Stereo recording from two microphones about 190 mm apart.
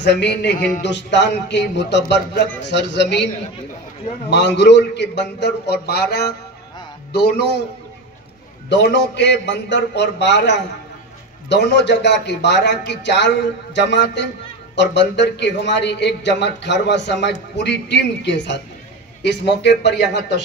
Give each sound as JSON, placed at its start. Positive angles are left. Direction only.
{"t": 0.0, "sound": "speech", "side_deg": 65}
{"t": 4.3, "sound": "speech", "side_deg": 65}
{"t": 8.6, "sound": "speech", "side_deg": 65}